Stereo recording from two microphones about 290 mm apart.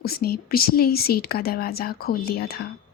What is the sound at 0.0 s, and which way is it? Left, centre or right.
Speech, left.